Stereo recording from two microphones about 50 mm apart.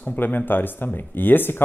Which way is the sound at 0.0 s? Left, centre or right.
Left.